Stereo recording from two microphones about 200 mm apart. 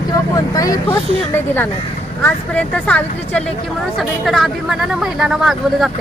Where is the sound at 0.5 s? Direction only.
15° left (ahead or behind).